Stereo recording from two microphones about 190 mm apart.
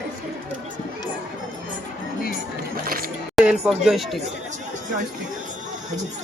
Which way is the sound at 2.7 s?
50° right (ahead or behind).